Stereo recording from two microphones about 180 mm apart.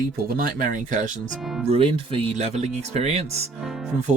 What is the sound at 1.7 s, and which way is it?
Speech, 30° right (ahead or behind).